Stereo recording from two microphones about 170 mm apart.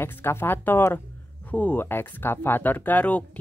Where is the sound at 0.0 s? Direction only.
15° left (ahead or behind).